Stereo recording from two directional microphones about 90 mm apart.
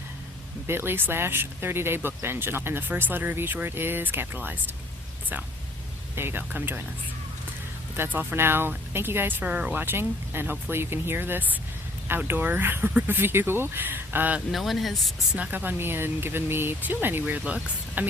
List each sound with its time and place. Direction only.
0.7 s speech: 25° right (ahead or behind)
6.1 s speech: 25° right (ahead or behind)
7.9 s speech: 20° right (ahead or behind)
9.4 s speech: 15° right (ahead or behind)
14.5 s speech: centre (ahead or behind)
15.4 s speech: 20° right (ahead or behind)